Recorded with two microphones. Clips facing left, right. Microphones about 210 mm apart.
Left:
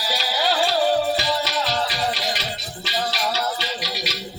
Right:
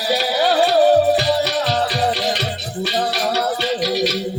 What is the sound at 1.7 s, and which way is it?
Music, 45° right (ahead or behind).